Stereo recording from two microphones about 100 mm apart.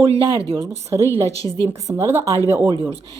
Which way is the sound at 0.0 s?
75° right (ahead or behind).